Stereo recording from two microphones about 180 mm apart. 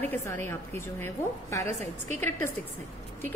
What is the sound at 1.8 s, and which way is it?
Speech, 40° right (ahead or behind).